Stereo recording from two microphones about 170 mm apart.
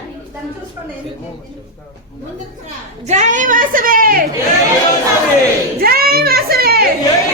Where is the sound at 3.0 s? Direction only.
45° right (ahead or behind).